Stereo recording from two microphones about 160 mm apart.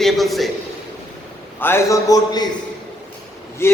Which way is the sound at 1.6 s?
15° left (ahead or behind).